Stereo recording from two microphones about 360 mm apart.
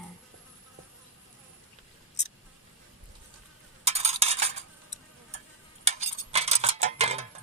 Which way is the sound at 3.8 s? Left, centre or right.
Centre.